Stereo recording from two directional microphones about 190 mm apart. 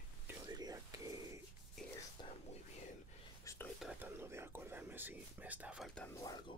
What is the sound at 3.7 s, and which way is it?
Whispering, 5° right (ahead or behind).